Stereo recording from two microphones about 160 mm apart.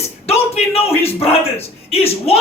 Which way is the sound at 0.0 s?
40° left (ahead or behind).